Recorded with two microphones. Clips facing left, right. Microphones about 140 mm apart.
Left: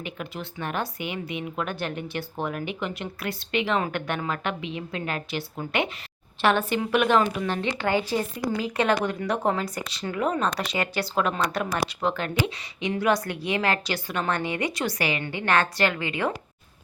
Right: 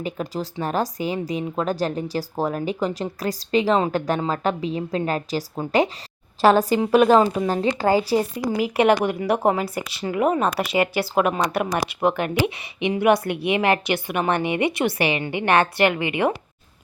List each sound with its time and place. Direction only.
0.0 s speech: 35° right (ahead or behind)
8.2 s a woman's voice: 10° right (ahead or behind)